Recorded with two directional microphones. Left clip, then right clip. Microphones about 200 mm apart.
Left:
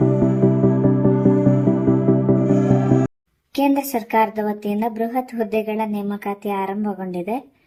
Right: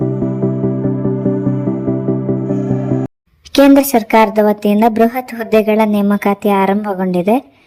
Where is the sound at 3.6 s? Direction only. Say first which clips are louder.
Right 11 dB; 35° right (ahead or behind).